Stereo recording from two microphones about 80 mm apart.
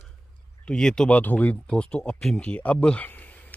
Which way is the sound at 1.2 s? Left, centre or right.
Centre.